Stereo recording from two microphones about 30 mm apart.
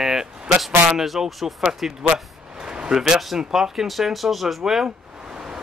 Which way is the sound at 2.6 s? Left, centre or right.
Right.